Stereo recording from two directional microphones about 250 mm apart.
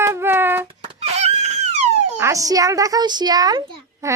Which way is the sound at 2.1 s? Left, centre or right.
Centre.